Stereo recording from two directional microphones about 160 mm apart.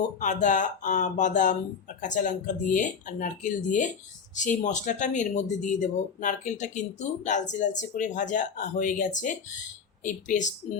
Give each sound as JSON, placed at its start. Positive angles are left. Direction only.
{"t": 0.2, "sound": "speech", "side_deg": 50}